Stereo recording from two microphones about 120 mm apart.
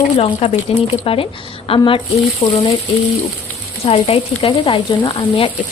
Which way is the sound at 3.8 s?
55° left (ahead or behind).